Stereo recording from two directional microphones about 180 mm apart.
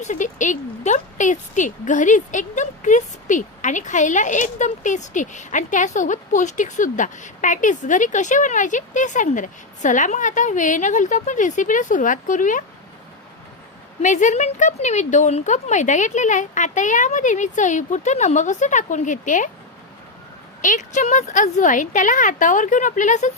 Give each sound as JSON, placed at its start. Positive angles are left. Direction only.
{"t": 0.0, "sound": "speech", "side_deg": 45}
{"t": 14.0, "sound": "speech", "side_deg": 45}
{"t": 20.6, "sound": "speech", "side_deg": 45}